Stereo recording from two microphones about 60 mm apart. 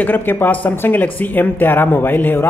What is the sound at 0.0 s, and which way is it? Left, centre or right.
Speech, left.